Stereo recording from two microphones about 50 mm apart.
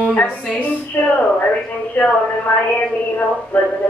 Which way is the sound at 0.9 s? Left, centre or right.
Left.